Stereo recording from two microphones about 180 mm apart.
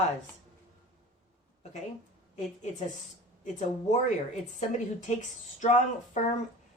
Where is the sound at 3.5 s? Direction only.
40° left (ahead or behind).